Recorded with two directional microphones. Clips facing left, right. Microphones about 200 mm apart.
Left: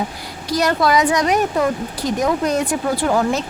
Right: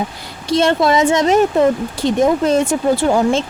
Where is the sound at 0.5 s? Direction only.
25° right (ahead or behind).